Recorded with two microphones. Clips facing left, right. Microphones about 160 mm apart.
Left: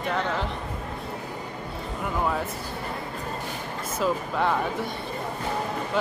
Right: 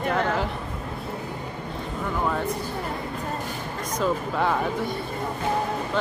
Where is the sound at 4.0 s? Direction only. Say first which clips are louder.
Right 1 dB; centre (ahead or behind).